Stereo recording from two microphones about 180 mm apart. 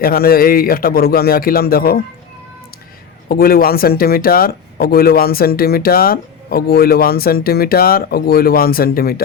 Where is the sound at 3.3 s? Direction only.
55° left (ahead or behind).